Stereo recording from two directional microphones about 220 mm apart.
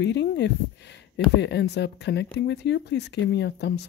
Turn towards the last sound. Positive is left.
turn(degrees=50)  # may be behind; listen again after turning